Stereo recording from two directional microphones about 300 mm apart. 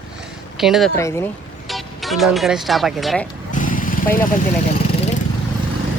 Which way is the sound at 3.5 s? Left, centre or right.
Left.